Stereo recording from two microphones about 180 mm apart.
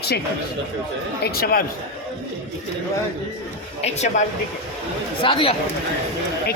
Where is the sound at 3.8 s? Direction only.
40° left (ahead or behind).